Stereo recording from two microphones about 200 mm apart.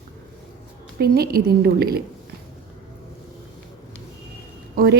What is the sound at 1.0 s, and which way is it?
Speech, 50° right (ahead or behind).